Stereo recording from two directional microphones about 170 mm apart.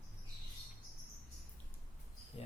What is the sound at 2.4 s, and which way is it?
Cricket, 35° left (ahead or behind).